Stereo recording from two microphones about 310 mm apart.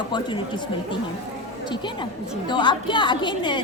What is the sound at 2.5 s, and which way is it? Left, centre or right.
A woman's voice, centre.